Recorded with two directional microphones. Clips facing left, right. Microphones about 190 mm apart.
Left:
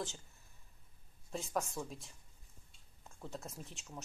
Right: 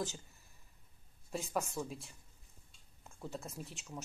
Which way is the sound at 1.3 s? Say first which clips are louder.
Right 1 dB; 5° right (ahead or behind).